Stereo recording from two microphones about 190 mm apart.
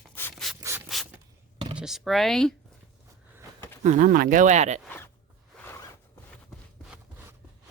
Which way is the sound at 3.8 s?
45° right (ahead or behind).